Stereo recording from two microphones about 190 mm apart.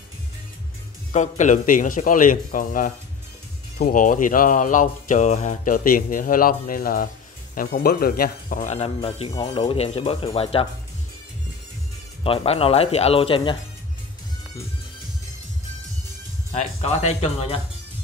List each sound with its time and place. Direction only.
1.1 s speech: 40° left (ahead or behind)
12.2 s speech: 30° left (ahead or behind)
16.5 s speech: 35° left (ahead or behind)